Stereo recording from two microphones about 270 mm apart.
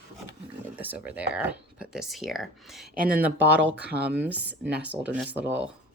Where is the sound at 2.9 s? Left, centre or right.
Right.